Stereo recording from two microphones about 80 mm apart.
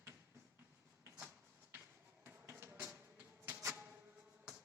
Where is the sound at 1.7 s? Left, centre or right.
Right.